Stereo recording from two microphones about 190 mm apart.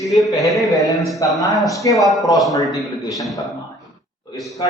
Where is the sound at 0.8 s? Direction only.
20° left (ahead or behind).